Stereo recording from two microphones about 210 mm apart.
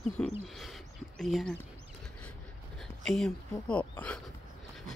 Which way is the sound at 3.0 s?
Centre (ahead or behind).